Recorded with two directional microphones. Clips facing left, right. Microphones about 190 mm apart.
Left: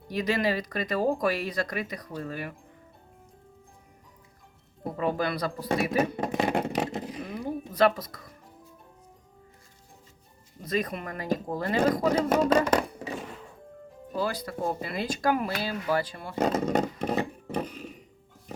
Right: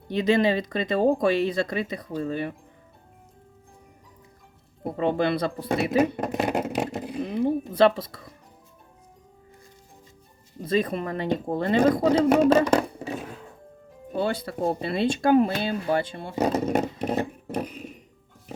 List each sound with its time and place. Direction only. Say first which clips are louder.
0.1 s speech: right 6 dB; 25° right (ahead or behind)
4.9 s speech: right 5 dB; 25° right (ahead or behind)
6.2 s vehicle: right 1 dB; centre (ahead or behind)
7.3 s speech: right 8 dB; 30° right (ahead or behind)
10.6 s speech: right 5 dB; 30° right (ahead or behind)
14.1 s speech: right 4 dB; 25° right (ahead or behind)
16.3 s speech: right 2 dB; 10° right (ahead or behind)
17.0 s a sound: right 2 dB; 5° right (ahead or behind)